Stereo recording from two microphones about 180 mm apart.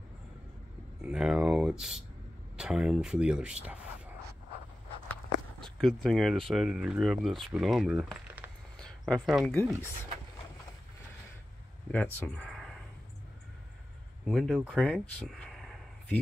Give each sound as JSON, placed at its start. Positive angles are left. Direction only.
{"t": 1.0, "sound": "speech", "side_deg": -5}
{"t": 5.6, "sound": "speech", "side_deg": 0}
{"t": 8.7, "sound": "a sound", "side_deg": 5}
{"t": 11.9, "sound": "speech", "side_deg": 10}
{"t": 14.2, "sound": "speech", "side_deg": 5}
{"t": 14.7, "sound": "a sound", "side_deg": 0}